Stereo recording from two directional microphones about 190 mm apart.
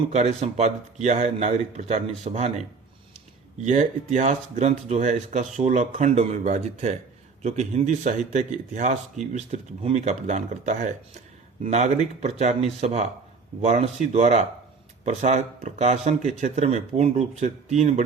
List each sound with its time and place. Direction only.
0.1 s speech: 35° right (ahead or behind)